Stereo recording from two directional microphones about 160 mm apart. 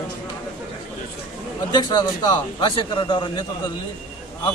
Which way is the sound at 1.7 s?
25° left (ahead or behind).